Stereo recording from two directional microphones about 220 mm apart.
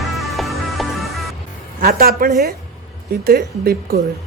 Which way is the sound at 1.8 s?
45° right (ahead or behind).